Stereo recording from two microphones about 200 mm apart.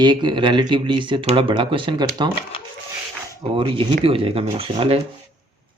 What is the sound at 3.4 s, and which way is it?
Speech, 25° right (ahead or behind).